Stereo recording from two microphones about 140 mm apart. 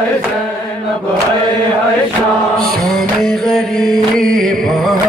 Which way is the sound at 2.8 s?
Centre (ahead or behind).